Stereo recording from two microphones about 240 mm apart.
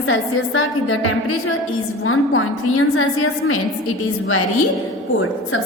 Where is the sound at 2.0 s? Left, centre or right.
Left.